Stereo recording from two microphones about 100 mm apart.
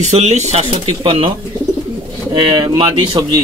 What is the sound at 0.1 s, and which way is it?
Speech, 90° right.